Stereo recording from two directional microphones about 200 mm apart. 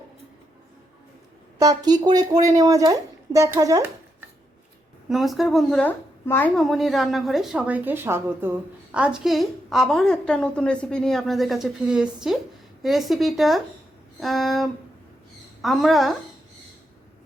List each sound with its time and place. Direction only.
1.5 s speech: 20° right (ahead or behind)
5.0 s a woman's voice: centre (ahead or behind)